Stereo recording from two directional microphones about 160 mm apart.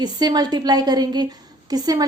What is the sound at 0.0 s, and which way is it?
A woman's voice, 25° right (ahead or behind).